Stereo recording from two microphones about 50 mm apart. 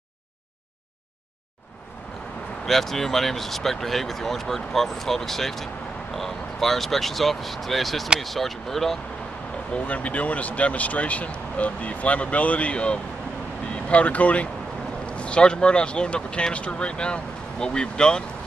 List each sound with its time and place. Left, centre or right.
2.6 s speech: centre
9.8 s speech: left